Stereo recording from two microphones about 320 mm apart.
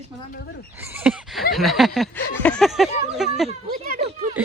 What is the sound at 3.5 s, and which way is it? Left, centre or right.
Speech, right.